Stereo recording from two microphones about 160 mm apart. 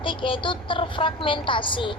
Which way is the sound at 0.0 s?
30° left (ahead or behind).